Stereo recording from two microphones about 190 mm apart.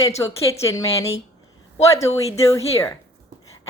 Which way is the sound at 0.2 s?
15° left (ahead or behind).